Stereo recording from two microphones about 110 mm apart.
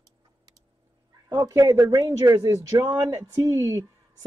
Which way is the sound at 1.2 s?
30° right (ahead or behind).